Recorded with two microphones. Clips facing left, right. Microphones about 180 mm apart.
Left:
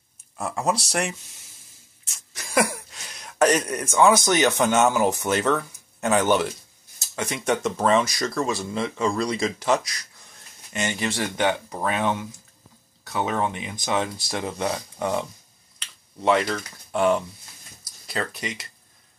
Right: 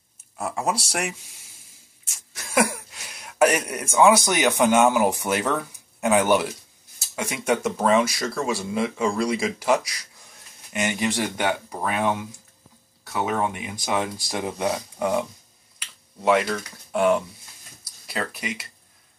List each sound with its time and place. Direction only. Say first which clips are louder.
0.4 s speech: left 1 dB; 5° right (ahead or behind)
2.3 s speech: even; 5° right (ahead or behind)
15.8 s finger snapping: even; 5° right (ahead or behind)
16.9 s speech: right 1 dB; 5° right (ahead or behind)